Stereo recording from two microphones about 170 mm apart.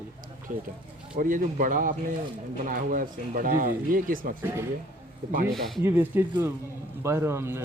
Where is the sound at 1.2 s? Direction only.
50° right (ahead or behind).